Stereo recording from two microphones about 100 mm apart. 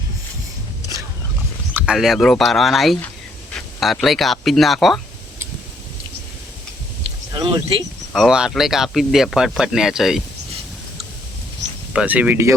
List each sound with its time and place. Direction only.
1.9 s speech: centre (ahead or behind)
7.3 s speech: 55° right (ahead or behind)
8.1 s speech: 5° right (ahead or behind)
11.9 s speech: 15° right (ahead or behind)